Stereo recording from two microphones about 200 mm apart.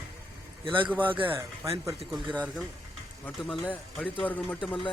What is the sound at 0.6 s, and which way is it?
Speech, 25° right (ahead or behind).